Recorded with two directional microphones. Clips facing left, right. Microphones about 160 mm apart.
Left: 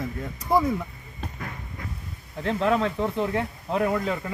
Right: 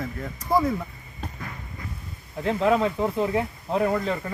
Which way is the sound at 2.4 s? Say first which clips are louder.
Right 2 dB; 5° right (ahead or behind).